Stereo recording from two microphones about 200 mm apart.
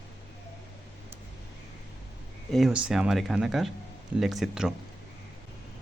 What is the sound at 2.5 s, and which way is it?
Speech, 5° right (ahead or behind).